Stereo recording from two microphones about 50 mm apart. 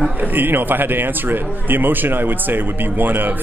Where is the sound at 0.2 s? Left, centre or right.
Right.